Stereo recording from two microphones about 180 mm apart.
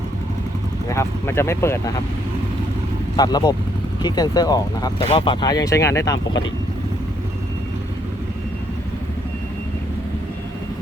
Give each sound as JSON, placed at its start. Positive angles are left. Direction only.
{"t": 0.9, "sound": "speech", "side_deg": 15}
{"t": 3.2, "sound": "speech", "side_deg": 20}